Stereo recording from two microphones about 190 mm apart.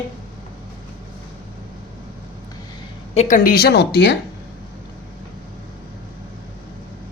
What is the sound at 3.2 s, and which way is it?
Speech, 45° left (ahead or behind).